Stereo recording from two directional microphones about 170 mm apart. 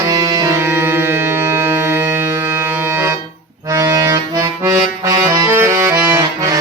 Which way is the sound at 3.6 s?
15° right (ahead or behind).